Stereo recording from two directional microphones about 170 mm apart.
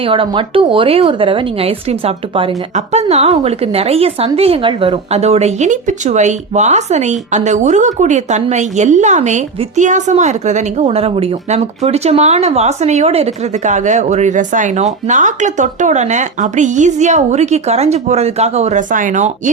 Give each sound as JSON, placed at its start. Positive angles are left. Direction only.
{"t": 0.0, "sound": "speech", "side_deg": -30}